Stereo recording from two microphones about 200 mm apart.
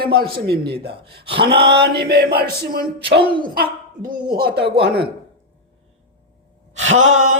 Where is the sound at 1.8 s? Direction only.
55° right (ahead or behind).